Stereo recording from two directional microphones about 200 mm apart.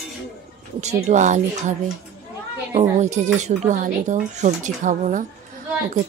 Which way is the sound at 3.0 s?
35° right (ahead or behind).